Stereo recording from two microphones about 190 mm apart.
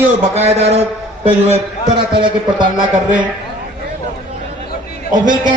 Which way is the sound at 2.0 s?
25° right (ahead or behind).